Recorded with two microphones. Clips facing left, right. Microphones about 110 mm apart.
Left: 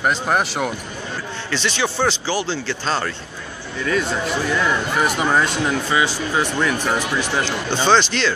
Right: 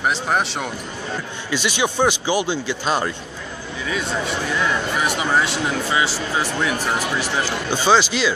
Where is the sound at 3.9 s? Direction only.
Centre (ahead or behind).